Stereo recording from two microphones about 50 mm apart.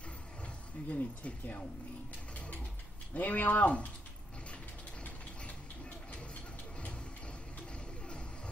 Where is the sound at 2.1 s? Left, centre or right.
Left.